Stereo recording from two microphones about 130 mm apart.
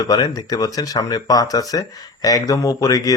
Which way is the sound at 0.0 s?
30° left (ahead or behind).